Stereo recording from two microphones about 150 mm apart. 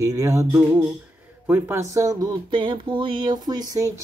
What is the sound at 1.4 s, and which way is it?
Speech, 15° right (ahead or behind).